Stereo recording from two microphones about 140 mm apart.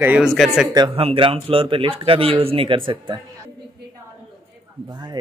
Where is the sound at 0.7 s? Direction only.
40° right (ahead or behind).